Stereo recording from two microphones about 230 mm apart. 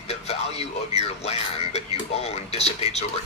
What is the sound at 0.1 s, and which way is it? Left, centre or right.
Speech, left.